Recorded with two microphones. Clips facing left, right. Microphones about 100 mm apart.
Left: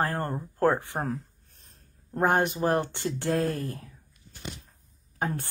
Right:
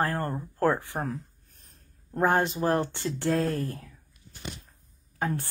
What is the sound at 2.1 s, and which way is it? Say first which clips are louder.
A woman's voice: even; 20° left (ahead or behind).